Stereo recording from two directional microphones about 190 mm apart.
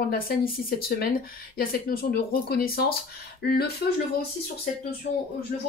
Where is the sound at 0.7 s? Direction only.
50° left (ahead or behind).